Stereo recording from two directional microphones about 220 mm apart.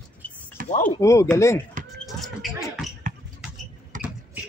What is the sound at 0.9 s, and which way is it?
Chopping, 15° left (ahead or behind).